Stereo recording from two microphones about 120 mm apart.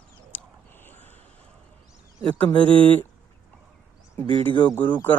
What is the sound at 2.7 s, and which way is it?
Speech, 45° right (ahead or behind).